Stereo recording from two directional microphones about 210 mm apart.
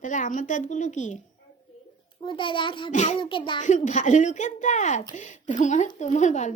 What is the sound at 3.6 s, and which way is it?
A child's voice, 35° left (ahead or behind).